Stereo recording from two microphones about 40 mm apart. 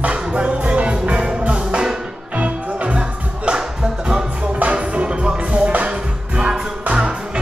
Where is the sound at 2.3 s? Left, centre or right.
Right.